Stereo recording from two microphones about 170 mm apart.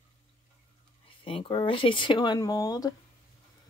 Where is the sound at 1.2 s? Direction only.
30° left (ahead or behind).